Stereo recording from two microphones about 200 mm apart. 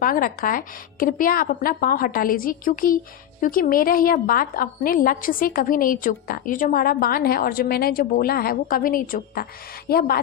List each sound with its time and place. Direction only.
0.0 s a woman's voice: 45° left (ahead or behind)